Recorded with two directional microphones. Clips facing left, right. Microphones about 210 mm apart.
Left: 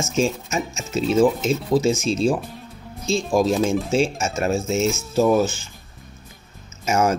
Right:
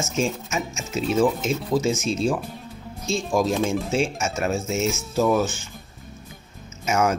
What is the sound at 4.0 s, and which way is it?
Speech, 30° left (ahead or behind).